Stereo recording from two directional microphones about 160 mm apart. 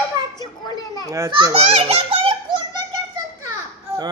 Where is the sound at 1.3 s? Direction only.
35° right (ahead or behind).